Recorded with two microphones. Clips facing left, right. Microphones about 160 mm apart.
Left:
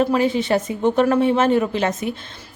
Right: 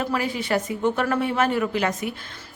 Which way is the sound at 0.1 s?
25° left (ahead or behind).